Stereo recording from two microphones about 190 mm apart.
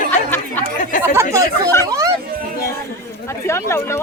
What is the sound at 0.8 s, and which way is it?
Speech, 40° left (ahead or behind).